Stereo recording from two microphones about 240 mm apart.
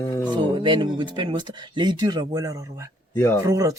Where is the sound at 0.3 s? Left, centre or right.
Centre.